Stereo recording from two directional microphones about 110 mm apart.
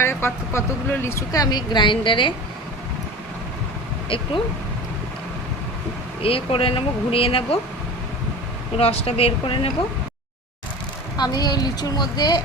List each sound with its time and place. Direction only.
0.0 s speech: 20° left (ahead or behind); by 2.3 s 50° left (ahead or behind)
4.1 s speech: 55° left (ahead or behind)
6.2 s speech: 55° left (ahead or behind)
8.8 s speech: 60° left (ahead or behind)
11.2 s a woman's voice: 40° left (ahead or behind)